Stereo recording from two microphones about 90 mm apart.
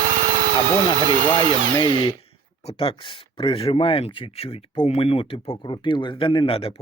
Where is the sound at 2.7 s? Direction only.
90° left.